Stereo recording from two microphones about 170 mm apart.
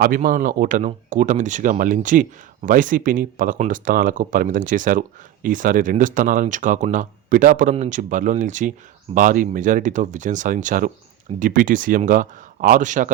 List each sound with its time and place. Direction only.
0.0 s speech: 55° right (ahead or behind)